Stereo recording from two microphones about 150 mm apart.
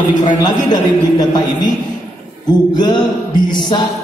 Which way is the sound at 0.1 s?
55° left (ahead or behind).